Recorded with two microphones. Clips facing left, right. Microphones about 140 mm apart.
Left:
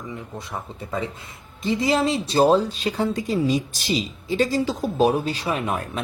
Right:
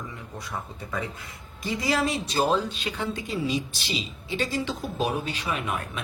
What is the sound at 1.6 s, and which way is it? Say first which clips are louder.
Speech: left 5 dB; 25° left (ahead or behind).